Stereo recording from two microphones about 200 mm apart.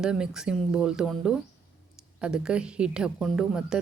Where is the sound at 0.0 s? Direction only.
5° right (ahead or behind).